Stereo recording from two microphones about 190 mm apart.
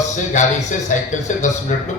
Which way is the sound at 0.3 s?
40° left (ahead or behind).